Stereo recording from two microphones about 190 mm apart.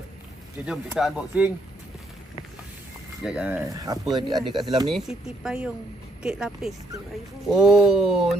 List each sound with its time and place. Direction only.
0.7 s speech: 5° right (ahead or behind)
3.3 s speech: 5° right (ahead or behind)
3.7 s speech: 20° right (ahead or behind)
4.9 s speech: 5° right (ahead or behind)